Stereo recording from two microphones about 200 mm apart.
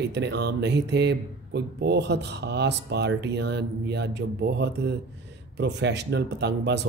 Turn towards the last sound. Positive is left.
turn(degrees=-60)  # may be behind; listen again after turning